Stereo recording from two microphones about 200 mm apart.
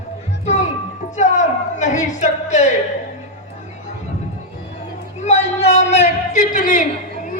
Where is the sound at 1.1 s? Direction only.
35° left (ahead or behind).